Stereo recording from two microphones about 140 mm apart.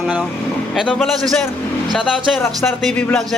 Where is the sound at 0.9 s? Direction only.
5° left (ahead or behind).